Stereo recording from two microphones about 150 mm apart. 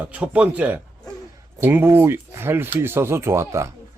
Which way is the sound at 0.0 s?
10° right (ahead or behind).